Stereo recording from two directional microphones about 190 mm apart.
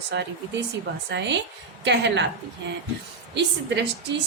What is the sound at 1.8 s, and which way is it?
Speech, 70° right (ahead or behind).